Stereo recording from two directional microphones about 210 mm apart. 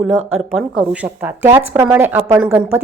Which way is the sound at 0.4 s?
Centre (ahead or behind).